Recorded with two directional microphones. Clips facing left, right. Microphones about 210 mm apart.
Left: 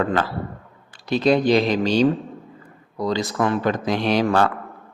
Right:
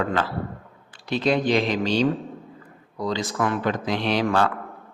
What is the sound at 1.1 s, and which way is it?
Speech, 40° left (ahead or behind).